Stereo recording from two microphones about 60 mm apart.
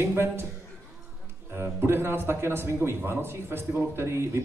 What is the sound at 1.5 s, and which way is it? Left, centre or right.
A man's voice, right.